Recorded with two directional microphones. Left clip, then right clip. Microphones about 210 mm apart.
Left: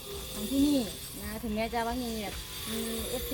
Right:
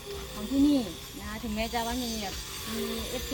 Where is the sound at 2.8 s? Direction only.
55° left (ahead or behind).